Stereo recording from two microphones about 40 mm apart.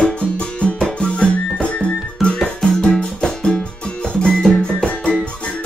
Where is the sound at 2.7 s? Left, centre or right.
Centre.